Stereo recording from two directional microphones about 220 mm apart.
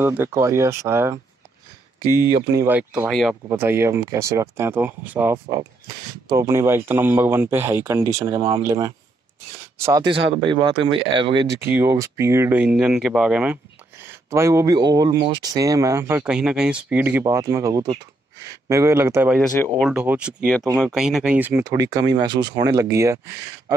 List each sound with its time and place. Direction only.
0.0 s speech: 10° right (ahead or behind)
11.6 s speech: 10° right (ahead or behind)